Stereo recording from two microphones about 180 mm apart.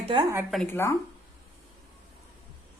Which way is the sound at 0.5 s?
10° left (ahead or behind).